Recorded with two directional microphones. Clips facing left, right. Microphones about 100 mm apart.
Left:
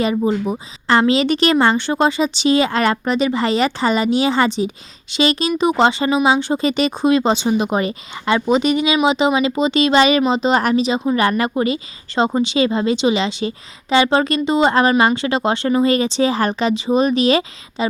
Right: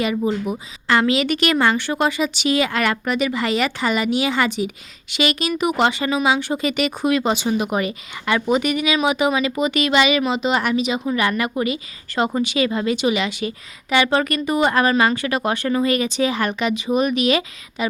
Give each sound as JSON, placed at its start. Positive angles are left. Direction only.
{"t": 0.0, "sound": "speech", "side_deg": 30}